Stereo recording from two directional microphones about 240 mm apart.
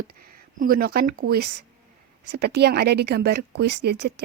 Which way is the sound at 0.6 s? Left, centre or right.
Right.